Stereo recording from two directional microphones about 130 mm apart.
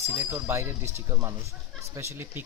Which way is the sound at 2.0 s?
20° right (ahead or behind).